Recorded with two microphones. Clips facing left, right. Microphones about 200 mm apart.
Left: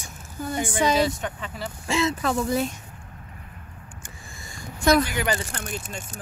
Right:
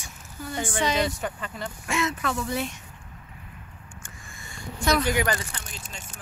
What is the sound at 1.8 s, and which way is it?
Speech, 30° left (ahead or behind).